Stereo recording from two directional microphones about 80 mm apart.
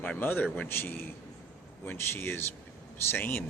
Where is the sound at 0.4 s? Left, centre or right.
Centre.